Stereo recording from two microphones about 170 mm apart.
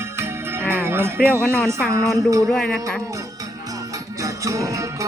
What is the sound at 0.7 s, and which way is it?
Jingle bell, 15° right (ahead or behind).